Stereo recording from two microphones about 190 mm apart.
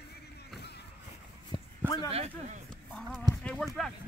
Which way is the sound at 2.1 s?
30° right (ahead or behind).